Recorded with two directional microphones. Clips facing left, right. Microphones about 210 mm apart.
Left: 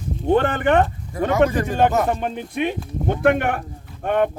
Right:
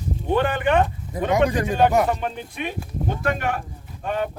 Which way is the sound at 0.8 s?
15° right (ahead or behind).